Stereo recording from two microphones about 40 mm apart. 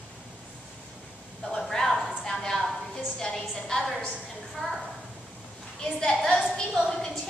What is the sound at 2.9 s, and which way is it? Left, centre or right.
Music, centre.